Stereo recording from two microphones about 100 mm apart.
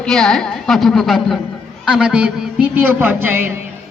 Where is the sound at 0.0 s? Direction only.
5° left (ahead or behind).